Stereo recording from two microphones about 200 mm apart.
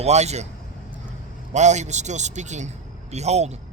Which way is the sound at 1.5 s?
35° right (ahead or behind).